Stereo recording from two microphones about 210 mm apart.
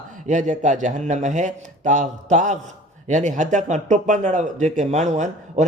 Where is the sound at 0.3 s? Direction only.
35° right (ahead or behind).